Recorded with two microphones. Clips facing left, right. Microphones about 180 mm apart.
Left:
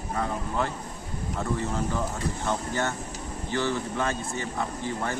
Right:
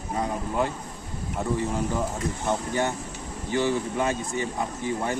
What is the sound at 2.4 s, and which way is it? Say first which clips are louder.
Speech: right 3 dB; 15° right (ahead or behind).